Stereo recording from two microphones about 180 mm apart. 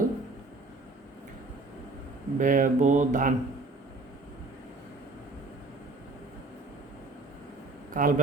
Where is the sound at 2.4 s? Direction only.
45° right (ahead or behind).